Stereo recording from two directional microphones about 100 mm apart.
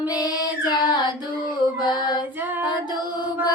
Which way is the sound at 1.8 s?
50° left (ahead or behind).